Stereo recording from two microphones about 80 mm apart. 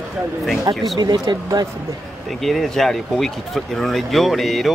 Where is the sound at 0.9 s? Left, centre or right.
Right.